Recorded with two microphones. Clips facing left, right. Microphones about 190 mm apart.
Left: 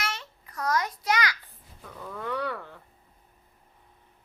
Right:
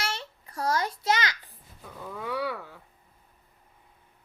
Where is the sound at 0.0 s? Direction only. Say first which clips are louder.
Right 1 dB; 30° right (ahead or behind).